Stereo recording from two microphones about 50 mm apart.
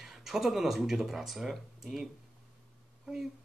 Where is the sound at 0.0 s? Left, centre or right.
Centre.